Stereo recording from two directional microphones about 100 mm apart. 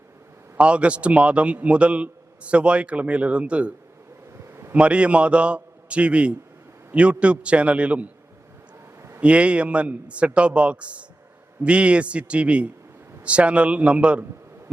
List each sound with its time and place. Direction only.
0.5 s a man's voice: 10° right (ahead or behind)
9.0 s a sound: 25° right (ahead or behind)
9.2 s a man's voice: 10° right (ahead or behind)